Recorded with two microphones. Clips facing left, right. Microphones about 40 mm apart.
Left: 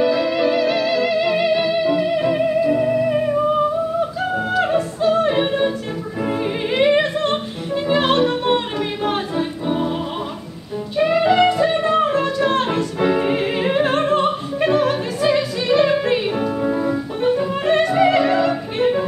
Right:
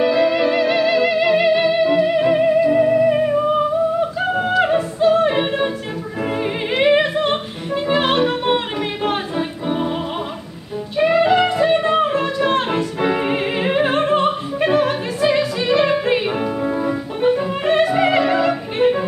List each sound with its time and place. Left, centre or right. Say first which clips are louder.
0.0 s music: right 2 dB; centre
6.7 s music: right 1 dB; centre
11.0 s music: right 1 dB; centre